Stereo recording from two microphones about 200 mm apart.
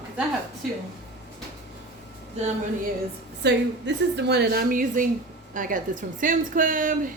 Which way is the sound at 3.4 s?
60° right (ahead or behind).